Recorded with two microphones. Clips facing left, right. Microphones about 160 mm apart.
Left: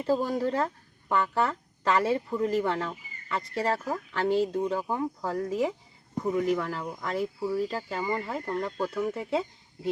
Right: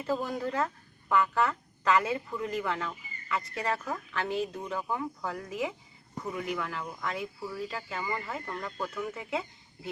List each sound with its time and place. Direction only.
0.0 s speech: 35° left (ahead or behind)